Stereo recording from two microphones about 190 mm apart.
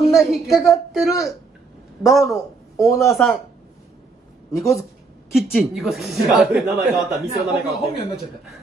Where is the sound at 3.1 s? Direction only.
5° left (ahead or behind).